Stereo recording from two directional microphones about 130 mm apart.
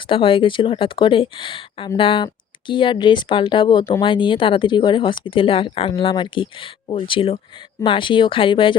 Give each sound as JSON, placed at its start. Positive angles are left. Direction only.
{"t": 0.1, "sound": "speech", "side_deg": 40}